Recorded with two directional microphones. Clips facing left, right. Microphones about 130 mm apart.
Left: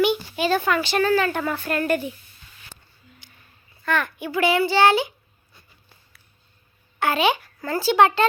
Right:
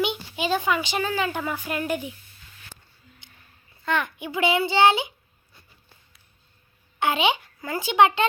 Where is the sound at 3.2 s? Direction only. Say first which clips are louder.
Left 1 dB; 20° right (ahead or behind).